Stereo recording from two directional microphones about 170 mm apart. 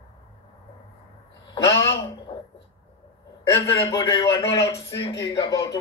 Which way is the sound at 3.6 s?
20° left (ahead or behind).